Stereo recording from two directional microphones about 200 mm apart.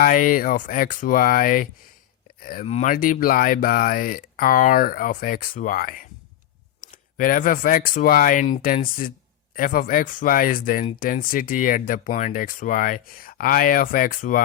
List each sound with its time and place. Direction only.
0.0 s speech: 45° left (ahead or behind)